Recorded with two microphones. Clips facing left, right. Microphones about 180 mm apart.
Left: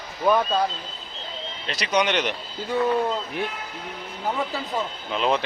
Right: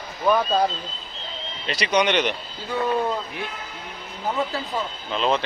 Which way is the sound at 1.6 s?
Centre (ahead or behind).